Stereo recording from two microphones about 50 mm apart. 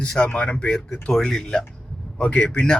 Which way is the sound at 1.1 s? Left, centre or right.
Centre.